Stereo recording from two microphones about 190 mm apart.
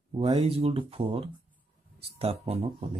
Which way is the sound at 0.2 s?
35° right (ahead or behind).